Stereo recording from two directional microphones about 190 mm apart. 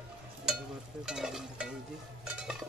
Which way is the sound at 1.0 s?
Centre (ahead or behind).